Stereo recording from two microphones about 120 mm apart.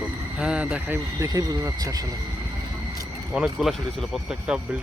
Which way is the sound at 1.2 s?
30° right (ahead or behind).